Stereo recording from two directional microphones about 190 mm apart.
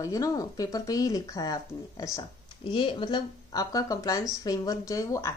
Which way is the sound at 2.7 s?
25° left (ahead or behind).